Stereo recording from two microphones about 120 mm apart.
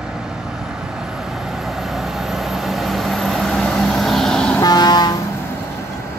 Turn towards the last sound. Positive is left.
turn(degrees=35)  # may be behind; listen again after turning